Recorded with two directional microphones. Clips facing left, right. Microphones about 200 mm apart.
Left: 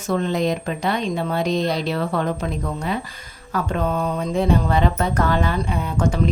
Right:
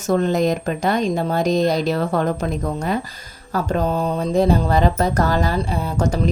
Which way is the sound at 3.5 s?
40° right (ahead or behind).